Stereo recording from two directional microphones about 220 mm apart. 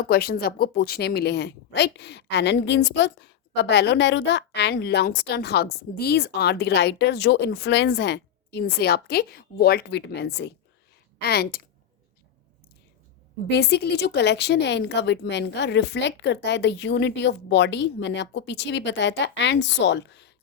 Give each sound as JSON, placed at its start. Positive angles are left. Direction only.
{"t": 0.0, "sound": "a woman's voice", "side_deg": 45}
{"t": 13.5, "sound": "a woman's voice", "side_deg": 50}